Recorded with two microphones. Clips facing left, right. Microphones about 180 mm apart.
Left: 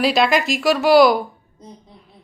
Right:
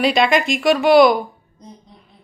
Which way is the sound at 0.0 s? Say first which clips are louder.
Right 1 dB; centre (ahead or behind).